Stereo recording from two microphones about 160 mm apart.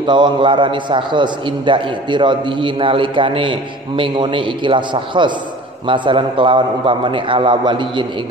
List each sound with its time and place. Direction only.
0.0 s a man's voice: 30° right (ahead or behind)